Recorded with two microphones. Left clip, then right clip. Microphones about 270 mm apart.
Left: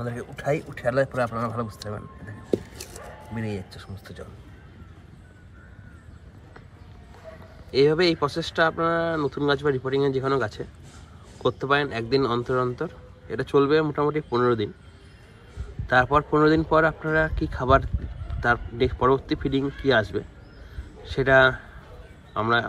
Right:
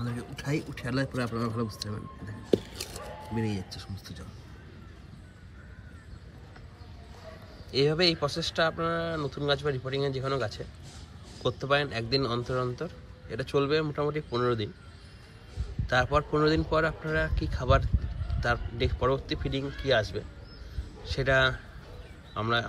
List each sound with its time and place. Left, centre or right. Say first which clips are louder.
0.6 s a man's voice: left 7 dB; centre
2.5 s a sound: even; right
3.3 s speech: left 1 dB; centre
7.7 s a man's voice: left 5 dB; centre
15.9 s a man's voice: left 6 dB; centre